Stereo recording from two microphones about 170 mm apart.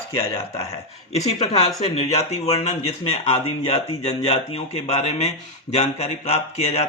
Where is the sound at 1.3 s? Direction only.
40° left (ahead or behind).